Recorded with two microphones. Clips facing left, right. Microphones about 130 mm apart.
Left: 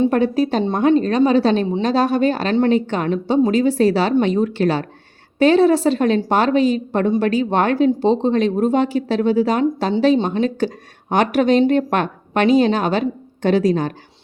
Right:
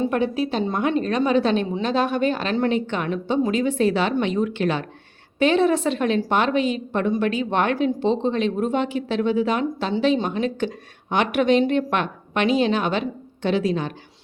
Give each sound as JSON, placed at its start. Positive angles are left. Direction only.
{"t": 0.1, "sound": "a woman's voice", "side_deg": 40}